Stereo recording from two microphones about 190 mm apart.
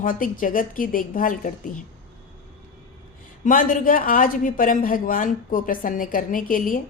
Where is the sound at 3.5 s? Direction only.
45° left (ahead or behind).